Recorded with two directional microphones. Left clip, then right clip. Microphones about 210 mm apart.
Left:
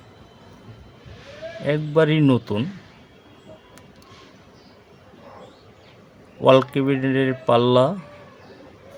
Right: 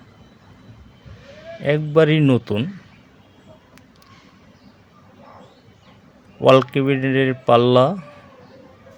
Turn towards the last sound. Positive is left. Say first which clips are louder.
# right 3 dB
turn(degrees=-15)  # may be behind; listen again after turning